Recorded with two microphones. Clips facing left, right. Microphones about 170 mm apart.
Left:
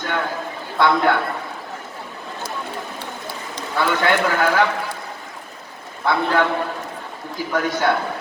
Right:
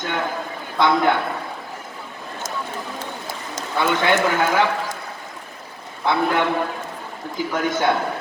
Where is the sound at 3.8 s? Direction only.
20° right (ahead or behind).